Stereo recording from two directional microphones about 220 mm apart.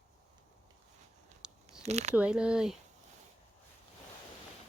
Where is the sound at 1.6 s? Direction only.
30° right (ahead or behind).